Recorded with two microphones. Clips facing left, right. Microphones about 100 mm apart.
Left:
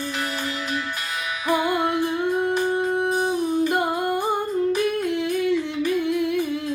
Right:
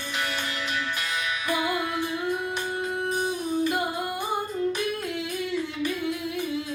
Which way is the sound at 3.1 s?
40° left (ahead or behind).